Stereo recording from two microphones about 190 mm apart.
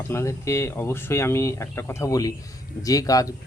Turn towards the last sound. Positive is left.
turn(degrees=20)  # may be behind; listen again after turning